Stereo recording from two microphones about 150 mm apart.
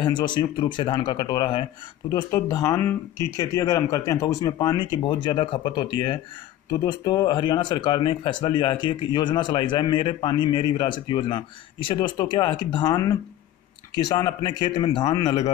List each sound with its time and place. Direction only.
0.0 s speech: 30° left (ahead or behind)